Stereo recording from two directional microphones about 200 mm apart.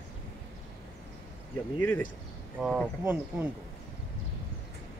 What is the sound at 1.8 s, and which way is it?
Speech, 10° left (ahead or behind).